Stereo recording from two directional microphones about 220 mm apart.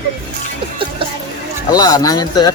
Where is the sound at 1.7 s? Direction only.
15° left (ahead or behind).